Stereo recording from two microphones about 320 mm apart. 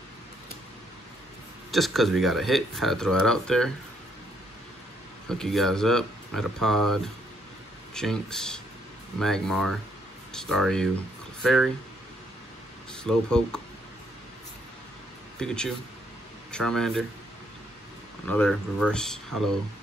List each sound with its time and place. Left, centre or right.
1.7 s speech: centre
5.3 s speech: centre
12.9 s speech: centre
15.3 s speech: centre
18.3 s speech: centre